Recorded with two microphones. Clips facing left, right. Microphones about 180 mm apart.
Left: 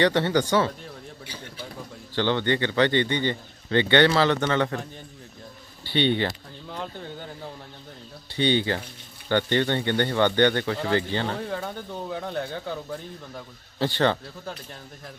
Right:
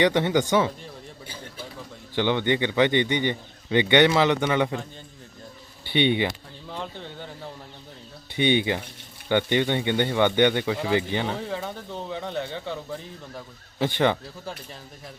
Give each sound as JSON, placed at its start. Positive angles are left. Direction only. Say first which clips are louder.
{"t": 0.0, "sound": "speech", "louder": "right 1 dB", "side_deg": -15}
{"t": 2.1, "sound": "speech", "louder": "right 1 dB", "side_deg": -15}
{"t": 5.9, "sound": "speech", "louder": "right 1 dB", "side_deg": -15}
{"t": 6.7, "sound": "speech", "louder": "even", "side_deg": 0}
{"t": 8.4, "sound": "speech", "louder": "right 1 dB", "side_deg": -15}
{"t": 11.3, "sound": "speech", "louder": "even", "side_deg": 0}
{"t": 13.7, "sound": "speech", "louder": "right 1 dB", "side_deg": -15}